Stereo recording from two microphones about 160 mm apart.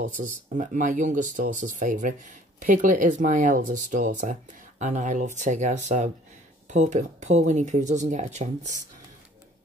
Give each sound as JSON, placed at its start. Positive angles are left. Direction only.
{"t": 0.2, "sound": "speech", "side_deg": -55}